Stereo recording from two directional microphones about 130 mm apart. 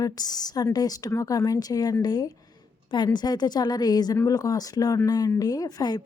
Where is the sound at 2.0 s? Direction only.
30° left (ahead or behind).